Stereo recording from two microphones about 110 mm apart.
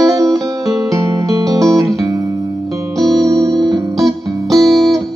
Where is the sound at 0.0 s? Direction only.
35° right (ahead or behind).